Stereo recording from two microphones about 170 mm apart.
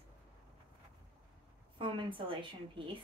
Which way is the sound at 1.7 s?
30° right (ahead or behind).